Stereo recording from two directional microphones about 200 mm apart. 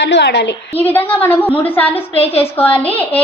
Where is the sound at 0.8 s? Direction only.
10° left (ahead or behind).